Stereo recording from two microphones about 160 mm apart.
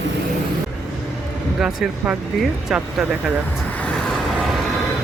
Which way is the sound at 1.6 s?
5° right (ahead or behind).